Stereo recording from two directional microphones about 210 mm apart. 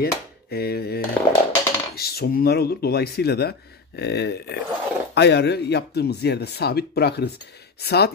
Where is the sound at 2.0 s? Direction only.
45° left (ahead or behind).